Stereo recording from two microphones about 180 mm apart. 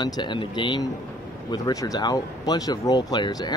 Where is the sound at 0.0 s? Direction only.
25° left (ahead or behind).